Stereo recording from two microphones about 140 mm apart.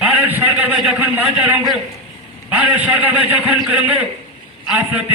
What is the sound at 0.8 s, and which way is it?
A man's voice, 10° right (ahead or behind).